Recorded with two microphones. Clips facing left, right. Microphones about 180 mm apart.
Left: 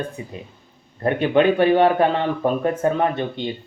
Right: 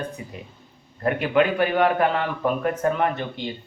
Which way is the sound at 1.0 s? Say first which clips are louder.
Left 4 dB; 25° left (ahead or behind).